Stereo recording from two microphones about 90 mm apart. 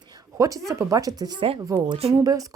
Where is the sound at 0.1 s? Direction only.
40° right (ahead or behind).